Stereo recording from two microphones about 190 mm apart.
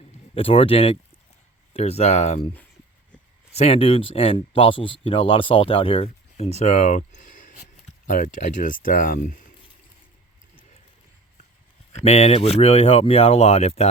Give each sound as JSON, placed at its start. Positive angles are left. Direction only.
{"t": 0.3, "sound": "speech", "side_deg": 30}
{"t": 3.5, "sound": "speech", "side_deg": 30}
{"t": 11.9, "sound": "speech", "side_deg": 35}